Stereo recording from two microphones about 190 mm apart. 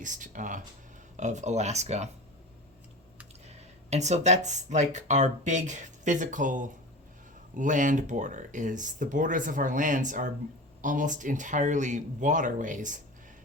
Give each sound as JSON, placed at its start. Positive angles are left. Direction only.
{"t": 0.0, "sound": "speech", "side_deg": -40}
{"t": 3.4, "sound": "speech", "side_deg": -35}